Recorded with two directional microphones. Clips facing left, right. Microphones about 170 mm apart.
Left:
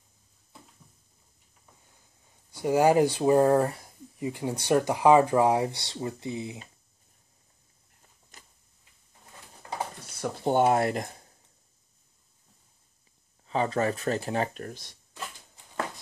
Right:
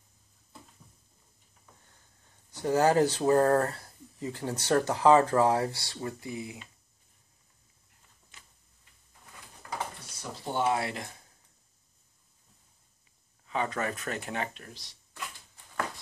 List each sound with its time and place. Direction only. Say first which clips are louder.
2.2 s speech: left 2 dB; 10° left (ahead or behind)
8.3 s tick-tock: left 3 dB; 40° left (ahead or behind)
10.3 s speech: left 6 dB; 50° left (ahead or behind)
13.5 s speech: left 5 dB; 30° left (ahead or behind); by 15.0 s 50° left (ahead or behind)